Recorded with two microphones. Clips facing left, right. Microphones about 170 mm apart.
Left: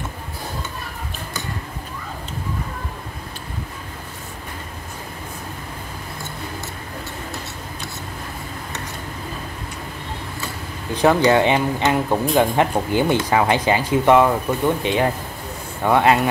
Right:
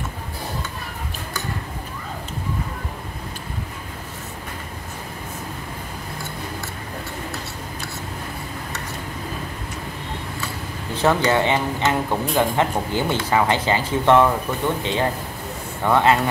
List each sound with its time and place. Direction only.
11.0 s speech: 15° left (ahead or behind)